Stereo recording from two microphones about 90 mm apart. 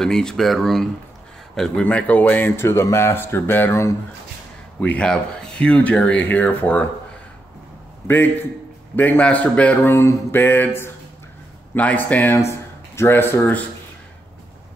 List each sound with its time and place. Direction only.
0.0 s speech: 5° left (ahead or behind); by 3.9 s 25° left (ahead or behind)
4.7 s speech: 15° left (ahead or behind)
8.1 s speech: 20° left (ahead or behind)
12.4 s speech: 30° left (ahead or behind)